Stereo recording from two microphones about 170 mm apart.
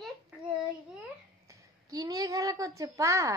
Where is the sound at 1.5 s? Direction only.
20° right (ahead or behind).